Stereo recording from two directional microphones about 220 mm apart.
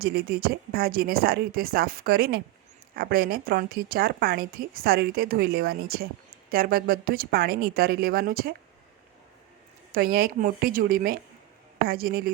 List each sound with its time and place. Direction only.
0.0 s a woman's voice: 45° right (ahead or behind)
9.9 s a woman's voice: 45° right (ahead or behind)